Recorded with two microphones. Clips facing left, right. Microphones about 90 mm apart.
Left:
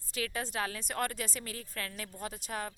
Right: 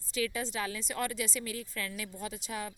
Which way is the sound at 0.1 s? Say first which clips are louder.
Right 3 dB; 50° left (ahead or behind).